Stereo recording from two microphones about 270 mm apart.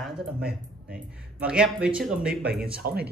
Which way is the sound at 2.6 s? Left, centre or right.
Right.